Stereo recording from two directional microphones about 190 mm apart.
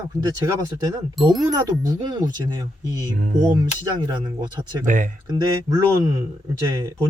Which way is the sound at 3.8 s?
20° right (ahead or behind).